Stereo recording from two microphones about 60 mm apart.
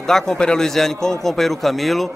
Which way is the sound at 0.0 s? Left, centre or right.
Centre.